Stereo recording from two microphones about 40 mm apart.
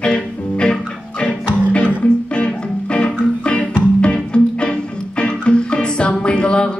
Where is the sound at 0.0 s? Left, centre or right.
Left.